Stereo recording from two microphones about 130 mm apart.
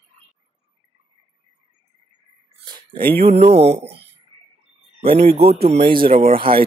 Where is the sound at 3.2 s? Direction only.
50° right (ahead or behind).